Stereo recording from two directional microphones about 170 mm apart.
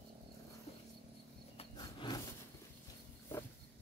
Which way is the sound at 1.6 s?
25° left (ahead or behind).